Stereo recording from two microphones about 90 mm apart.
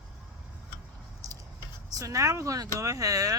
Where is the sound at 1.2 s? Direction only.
40° right (ahead or behind).